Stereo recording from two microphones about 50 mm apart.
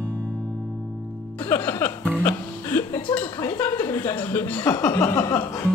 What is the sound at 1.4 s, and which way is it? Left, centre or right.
Music, left.